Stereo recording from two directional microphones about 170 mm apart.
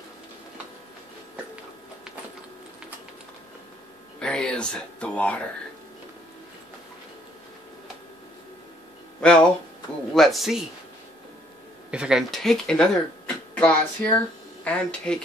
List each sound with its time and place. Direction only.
4.2 s a sound: 5° left (ahead or behind)
9.2 s speech: 5° left (ahead or behind)
11.9 s speech: 5° right (ahead or behind)